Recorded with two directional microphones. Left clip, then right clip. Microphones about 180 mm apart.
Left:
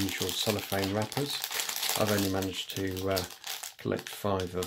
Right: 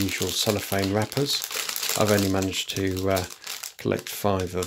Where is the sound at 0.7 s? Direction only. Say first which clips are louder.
Right 6 dB; 30° right (ahead or behind).